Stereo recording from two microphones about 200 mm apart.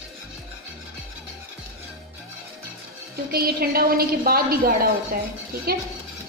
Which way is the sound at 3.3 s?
50° right (ahead or behind).